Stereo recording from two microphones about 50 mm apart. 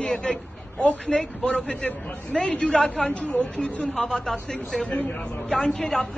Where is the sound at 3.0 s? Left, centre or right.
Left.